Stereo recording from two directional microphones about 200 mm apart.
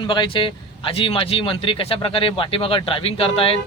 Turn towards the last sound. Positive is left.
turn(degrees=25)  # may be behind; listen again after turning